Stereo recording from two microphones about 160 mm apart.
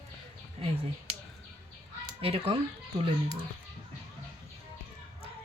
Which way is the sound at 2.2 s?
35° right (ahead or behind).